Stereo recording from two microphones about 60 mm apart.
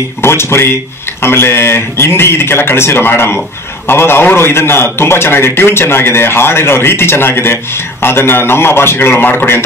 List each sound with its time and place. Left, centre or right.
0.2 s a man's voice: left